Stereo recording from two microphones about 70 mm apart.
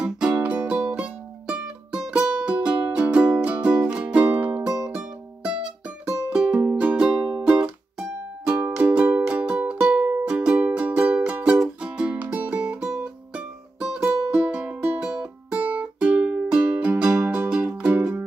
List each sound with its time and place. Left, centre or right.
0.0 s music: centre
4.6 s music: centre
6.1 s music: centre
8.7 s music: centre